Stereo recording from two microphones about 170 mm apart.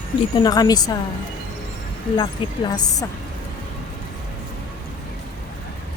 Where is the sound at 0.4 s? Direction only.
25° left (ahead or behind).